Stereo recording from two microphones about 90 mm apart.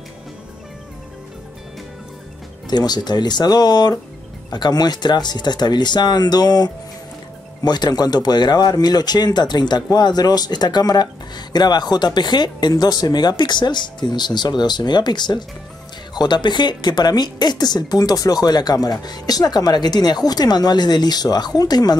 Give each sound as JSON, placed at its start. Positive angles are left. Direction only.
{"t": 2.7, "sound": "speech", "side_deg": 50}